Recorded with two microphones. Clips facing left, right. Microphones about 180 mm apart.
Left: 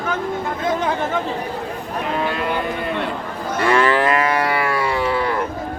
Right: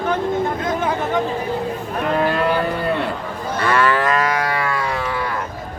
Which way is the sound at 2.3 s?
45° right (ahead or behind).